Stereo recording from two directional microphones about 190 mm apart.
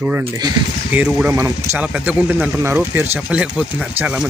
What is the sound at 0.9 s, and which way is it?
Speech, 5° right (ahead or behind).